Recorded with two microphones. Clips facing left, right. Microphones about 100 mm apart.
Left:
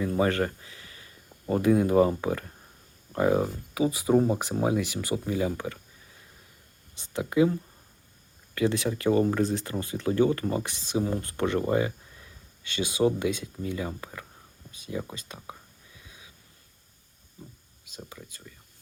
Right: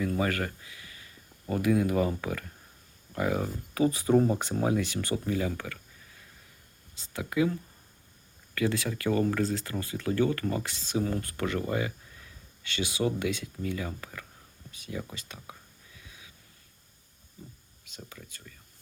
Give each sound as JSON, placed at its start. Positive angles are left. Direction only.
{"t": 0.0, "sound": "speech", "side_deg": 25}
{"t": 3.8, "sound": "speech", "side_deg": 10}
{"t": 6.9, "sound": "speech", "side_deg": 20}
{"t": 16.0, "sound": "wheeze", "side_deg": 25}
{"t": 18.1, "sound": "speech", "side_deg": 15}